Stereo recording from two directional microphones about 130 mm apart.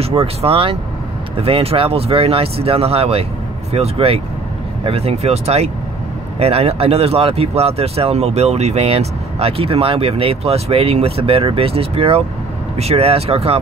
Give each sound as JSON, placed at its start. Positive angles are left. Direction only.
{"t": 0.2, "sound": "speech", "side_deg": -45}